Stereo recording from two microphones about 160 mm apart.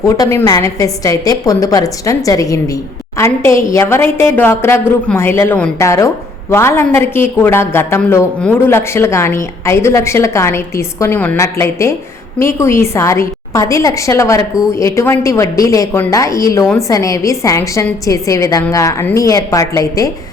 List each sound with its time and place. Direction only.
0.0 s a woman's voice: 20° left (ahead or behind)